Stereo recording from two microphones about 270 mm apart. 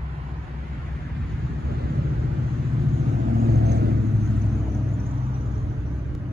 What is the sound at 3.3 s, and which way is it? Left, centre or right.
Vehicle, right.